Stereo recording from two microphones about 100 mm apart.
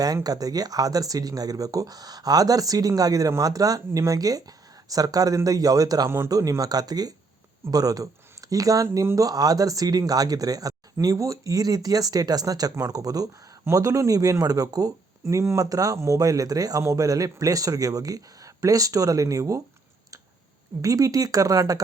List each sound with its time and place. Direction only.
0.0 s speech: 40° right (ahead or behind)
6.1 s speech: 25° right (ahead or behind)
6.3 s speech: 35° right (ahead or behind)
20.8 s speech: 35° right (ahead or behind)